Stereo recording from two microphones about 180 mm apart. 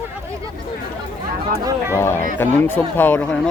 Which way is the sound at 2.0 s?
15° left (ahead or behind).